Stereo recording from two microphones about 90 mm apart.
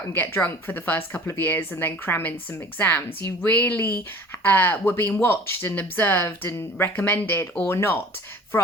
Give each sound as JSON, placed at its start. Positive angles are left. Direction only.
{"t": 0.1, "sound": "speech", "side_deg": 20}